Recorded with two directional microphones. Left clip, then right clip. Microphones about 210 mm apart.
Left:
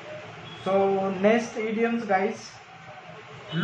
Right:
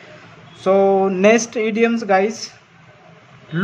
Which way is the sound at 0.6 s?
55° right (ahead or behind).